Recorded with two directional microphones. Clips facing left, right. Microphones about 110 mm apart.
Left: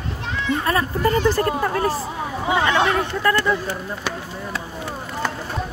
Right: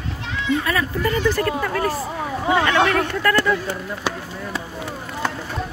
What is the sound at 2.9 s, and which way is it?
Speech, 20° left (ahead or behind).